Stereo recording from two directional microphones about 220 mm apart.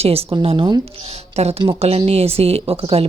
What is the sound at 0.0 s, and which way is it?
Speech, 25° right (ahead or behind).